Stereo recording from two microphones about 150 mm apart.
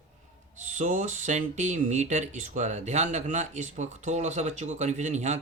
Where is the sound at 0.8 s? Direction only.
55° right (ahead or behind).